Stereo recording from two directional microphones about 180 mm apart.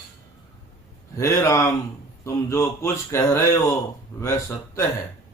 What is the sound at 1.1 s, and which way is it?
Mantra, 15° left (ahead or behind).